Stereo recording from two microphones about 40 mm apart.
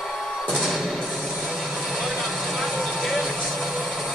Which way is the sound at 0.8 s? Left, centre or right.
Centre.